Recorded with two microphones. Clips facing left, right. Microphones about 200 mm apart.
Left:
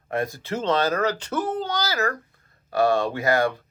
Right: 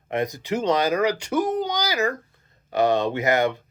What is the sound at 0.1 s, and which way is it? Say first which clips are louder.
Speech: right 2 dB; 20° right (ahead or behind).